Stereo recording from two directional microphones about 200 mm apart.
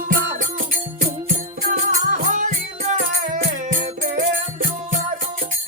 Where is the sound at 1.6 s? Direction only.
40° right (ahead or behind).